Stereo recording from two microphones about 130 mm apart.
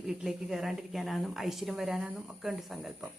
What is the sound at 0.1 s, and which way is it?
Speech, centre (ahead or behind).